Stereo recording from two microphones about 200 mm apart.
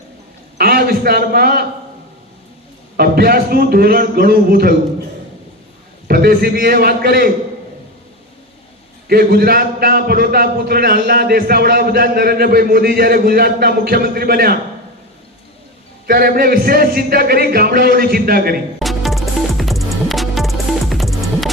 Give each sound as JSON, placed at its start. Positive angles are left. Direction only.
{"t": 0.6, "sound": "a man's voice", "side_deg": -50}
{"t": 3.0, "sound": "a man's voice", "side_deg": -50}
{"t": 6.1, "sound": "a man's voice", "side_deg": -50}
{"t": 9.0, "sound": "a man's voice", "side_deg": -50}
{"t": 16.0, "sound": "a man's voice", "side_deg": -45}
{"t": 18.8, "sound": "music", "side_deg": 0}